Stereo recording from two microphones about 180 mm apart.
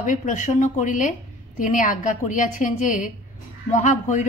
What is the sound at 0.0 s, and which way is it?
A woman's voice, 45° left (ahead or behind).